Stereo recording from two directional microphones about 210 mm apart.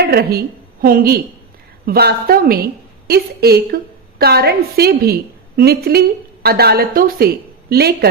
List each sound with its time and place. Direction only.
0.1 s a woman's voice: 50° right (ahead or behind)